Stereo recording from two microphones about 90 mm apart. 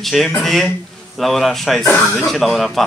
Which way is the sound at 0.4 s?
5° left (ahead or behind).